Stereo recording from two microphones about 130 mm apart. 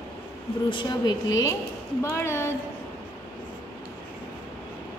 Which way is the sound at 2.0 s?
20° left (ahead or behind).